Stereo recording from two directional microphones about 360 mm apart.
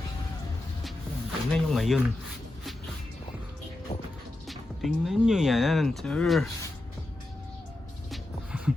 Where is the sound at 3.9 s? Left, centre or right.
Centre.